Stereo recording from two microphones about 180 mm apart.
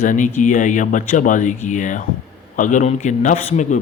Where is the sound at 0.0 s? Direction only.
45° left (ahead or behind).